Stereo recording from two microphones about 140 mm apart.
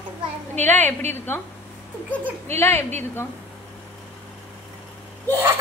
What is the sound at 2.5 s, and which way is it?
Speech, 15° left (ahead or behind).